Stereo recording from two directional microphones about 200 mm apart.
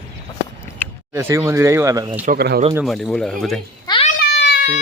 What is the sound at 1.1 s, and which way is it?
Speech, 15° right (ahead or behind).